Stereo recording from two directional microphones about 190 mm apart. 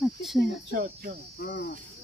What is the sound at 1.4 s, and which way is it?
Speech, 55° left (ahead or behind).